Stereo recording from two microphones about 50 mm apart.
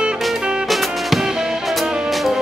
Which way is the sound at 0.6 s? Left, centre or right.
Centre.